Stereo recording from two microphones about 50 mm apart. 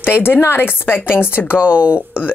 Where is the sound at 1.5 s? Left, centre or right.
Right.